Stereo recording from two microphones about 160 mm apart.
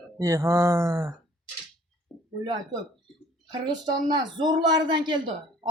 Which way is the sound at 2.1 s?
5° right (ahead or behind).